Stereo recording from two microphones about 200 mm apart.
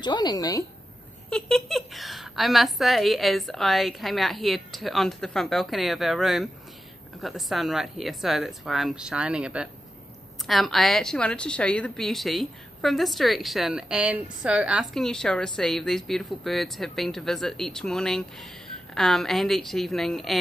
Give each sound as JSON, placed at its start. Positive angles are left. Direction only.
{"t": 0.0, "sound": "a woman's voice", "side_deg": 20}
{"t": 1.3, "sound": "a woman's voice", "side_deg": 0}